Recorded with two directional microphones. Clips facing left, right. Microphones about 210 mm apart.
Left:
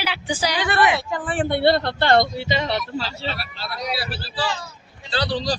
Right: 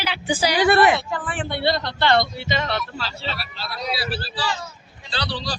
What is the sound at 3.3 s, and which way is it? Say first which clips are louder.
Speech: left 1 dB; 55° left (ahead or behind).